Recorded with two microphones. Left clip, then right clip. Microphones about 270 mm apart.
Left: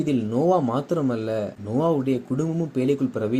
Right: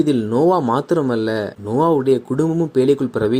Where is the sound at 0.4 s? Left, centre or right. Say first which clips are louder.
Right 5 dB; right.